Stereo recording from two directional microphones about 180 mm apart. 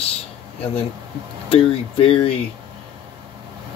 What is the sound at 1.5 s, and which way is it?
Speech, 30° left (ahead or behind).